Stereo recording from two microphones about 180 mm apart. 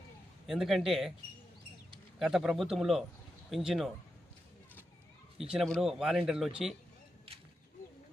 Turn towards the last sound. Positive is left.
turn(degrees=0)  # may be behind; listen again after turning